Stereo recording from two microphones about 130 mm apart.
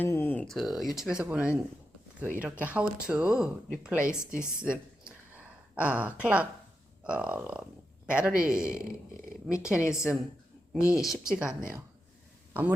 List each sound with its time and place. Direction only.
0.0 s a sound: 15° left (ahead or behind)
0.4 s speech: centre (ahead or behind)
10.8 s speech: 25° left (ahead or behind)
11.0 s speech: 5° right (ahead or behind)